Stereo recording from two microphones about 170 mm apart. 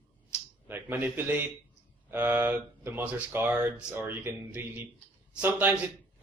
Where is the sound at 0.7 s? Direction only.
10° right (ahead or behind).